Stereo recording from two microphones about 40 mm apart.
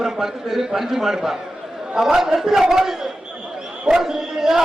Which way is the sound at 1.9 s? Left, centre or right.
Centre.